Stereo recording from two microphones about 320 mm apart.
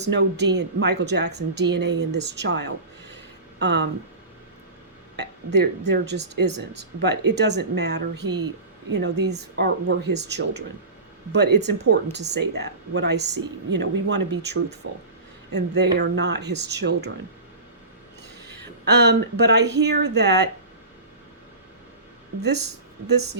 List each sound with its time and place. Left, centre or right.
0.0 s speech: right
5.1 s speech: right
18.9 s speech: right
22.4 s speech: right